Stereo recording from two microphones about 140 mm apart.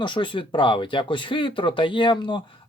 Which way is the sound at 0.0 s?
35° left (ahead or behind).